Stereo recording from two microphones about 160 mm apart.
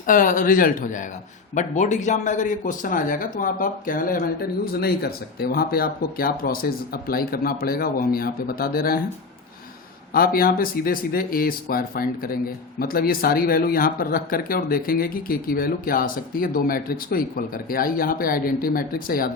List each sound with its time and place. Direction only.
0.0 s speech: 55° left (ahead or behind)
10.1 s speech: 65° left (ahead or behind)